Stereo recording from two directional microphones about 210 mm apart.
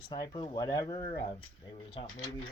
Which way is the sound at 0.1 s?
25° left (ahead or behind).